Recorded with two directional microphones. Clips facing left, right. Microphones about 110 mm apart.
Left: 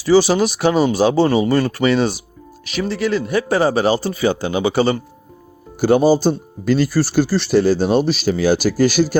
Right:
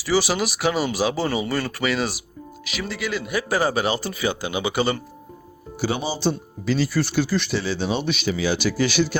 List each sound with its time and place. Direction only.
0.2 s speech: 25° left (ahead or behind)
1.5 s speech: 20° left (ahead or behind)
1.8 s speech: 30° left (ahead or behind)
5.7 s speech: 45° left (ahead or behind)
7.5 s speech: 45° left (ahead or behind)